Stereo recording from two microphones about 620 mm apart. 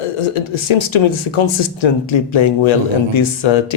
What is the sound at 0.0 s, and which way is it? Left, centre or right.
Speech, left.